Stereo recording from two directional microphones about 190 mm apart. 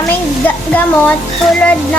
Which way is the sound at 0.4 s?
10° left (ahead or behind).